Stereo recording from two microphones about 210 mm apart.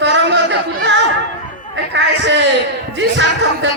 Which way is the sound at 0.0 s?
55° right (ahead or behind).